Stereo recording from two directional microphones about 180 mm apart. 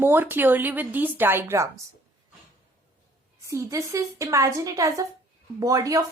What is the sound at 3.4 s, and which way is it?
Speech, 15° right (ahead or behind).